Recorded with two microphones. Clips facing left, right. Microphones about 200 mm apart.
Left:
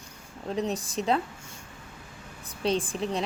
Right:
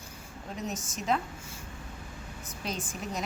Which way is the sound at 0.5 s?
35° left (ahead or behind).